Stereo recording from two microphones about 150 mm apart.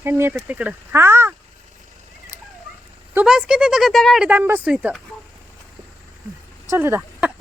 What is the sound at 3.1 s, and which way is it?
Speech, 5° right (ahead or behind).